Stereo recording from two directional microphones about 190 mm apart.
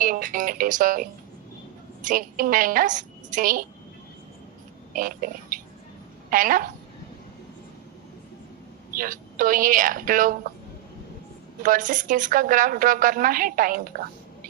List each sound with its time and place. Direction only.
0.0 s music: 45° right (ahead or behind)
2.0 s a woman's voice: 45° right (ahead or behind)
4.9 s a woman's voice: 45° right (ahead or behind)
9.0 s a woman's voice: 45° right (ahead or behind)
11.6 s a woman's voice: 45° right (ahead or behind)